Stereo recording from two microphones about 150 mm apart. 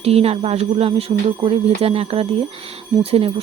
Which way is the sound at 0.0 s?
40° right (ahead or behind).